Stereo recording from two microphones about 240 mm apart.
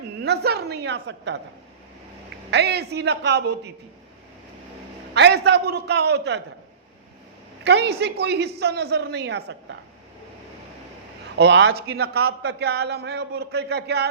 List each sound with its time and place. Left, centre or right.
0.2 s a man's voice: right
2.5 s a man's voice: right
5.1 s a man's voice: right
7.6 s a man's voice: right
11.3 s a man's voice: right